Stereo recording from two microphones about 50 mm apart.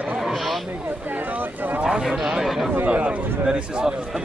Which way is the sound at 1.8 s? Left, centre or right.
Centre.